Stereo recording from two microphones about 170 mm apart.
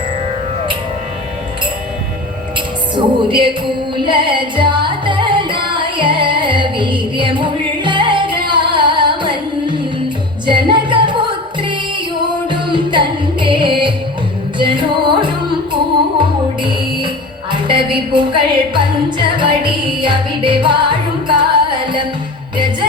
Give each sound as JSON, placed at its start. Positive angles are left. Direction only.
{"t": 2.9, "sound": "music", "side_deg": -30}
{"t": 17.5, "sound": "music", "side_deg": -30}